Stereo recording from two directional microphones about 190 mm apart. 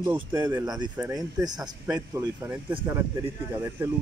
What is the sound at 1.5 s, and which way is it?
Speech, 5° right (ahead or behind).